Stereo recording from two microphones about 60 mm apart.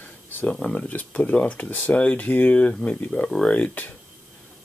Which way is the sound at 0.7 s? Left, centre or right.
Left.